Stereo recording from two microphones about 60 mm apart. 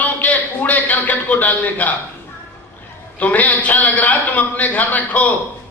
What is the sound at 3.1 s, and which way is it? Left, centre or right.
A man's voice, left.